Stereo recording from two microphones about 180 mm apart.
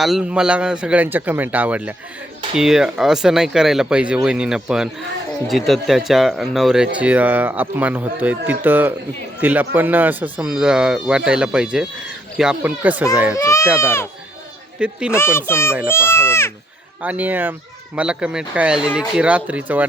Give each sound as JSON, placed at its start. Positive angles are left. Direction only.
{"t": 0.0, "sound": "speech", "side_deg": -5}
{"t": 13.3, "sound": "a child's voice", "side_deg": 15}
{"t": 14.8, "sound": "speech", "side_deg": -5}
{"t": 15.1, "sound": "a child's voice", "side_deg": 15}
{"t": 17.0, "sound": "speech", "side_deg": -10}